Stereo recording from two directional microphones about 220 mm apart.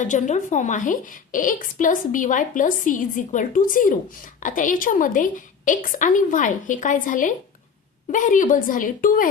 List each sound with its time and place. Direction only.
0.0 s a woman's voice: 35° left (ahead or behind)